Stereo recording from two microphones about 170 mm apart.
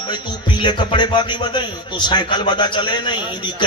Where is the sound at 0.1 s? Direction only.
25° left (ahead or behind).